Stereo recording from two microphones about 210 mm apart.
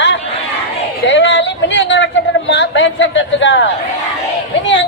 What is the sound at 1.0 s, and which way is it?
A man's voice, 55° left (ahead or behind).